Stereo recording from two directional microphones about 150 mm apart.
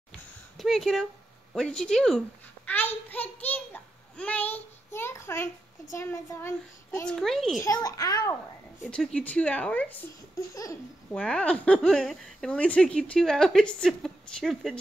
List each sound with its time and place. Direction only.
0.6 s a child's voice: centre (ahead or behind); by 5.5 s 15° left (ahead or behind)
5.9 s child singing: 20° left (ahead or behind)
7.1 s a woman's voice: centre (ahead or behind)
7.6 s child singing: 20° left (ahead or behind)
8.8 s speech: 5° left (ahead or behind)
10.5 s child singing: 20° left (ahead or behind)
11.1 s a woman's voice: 5° left (ahead or behind)